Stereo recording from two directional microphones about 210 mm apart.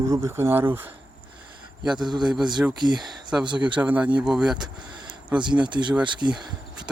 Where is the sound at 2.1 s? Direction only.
20° right (ahead or behind).